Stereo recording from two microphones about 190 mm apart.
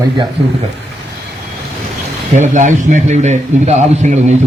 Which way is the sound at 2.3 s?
40° right (ahead or behind).